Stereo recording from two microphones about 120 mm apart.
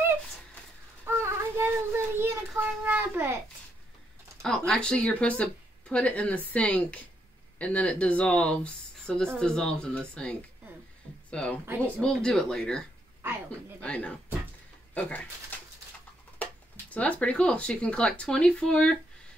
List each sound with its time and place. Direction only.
1.0 s child singing: 20° right (ahead or behind)
2.8 s a child's voice: 15° right (ahead or behind)
4.4 s speech: 5° left (ahead or behind)
16.9 s speech: 10° left (ahead or behind)